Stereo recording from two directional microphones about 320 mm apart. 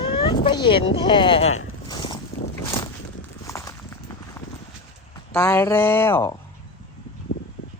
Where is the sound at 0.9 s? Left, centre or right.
Centre.